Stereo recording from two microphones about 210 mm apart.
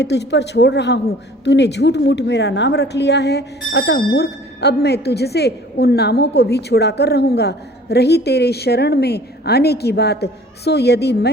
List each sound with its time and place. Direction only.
0.0 s a woman's voice: 55° left (ahead or behind)